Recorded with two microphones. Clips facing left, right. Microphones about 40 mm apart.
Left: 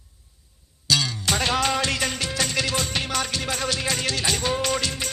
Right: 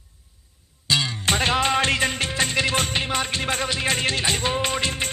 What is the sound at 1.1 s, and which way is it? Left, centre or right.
Music, right.